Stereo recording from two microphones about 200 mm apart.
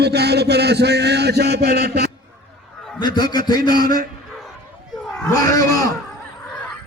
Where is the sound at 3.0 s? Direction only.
20° left (ahead or behind).